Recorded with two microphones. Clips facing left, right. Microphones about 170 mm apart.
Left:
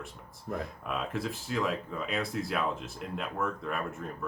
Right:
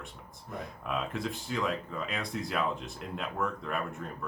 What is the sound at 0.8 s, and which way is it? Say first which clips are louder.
Speech: right 2 dB; centre (ahead or behind).